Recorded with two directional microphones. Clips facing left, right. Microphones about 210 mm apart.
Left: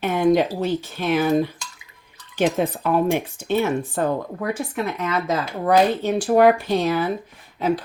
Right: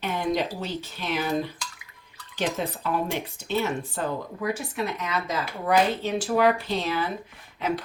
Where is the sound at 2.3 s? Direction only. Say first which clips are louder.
Left 8 dB; 50° left (ahead or behind).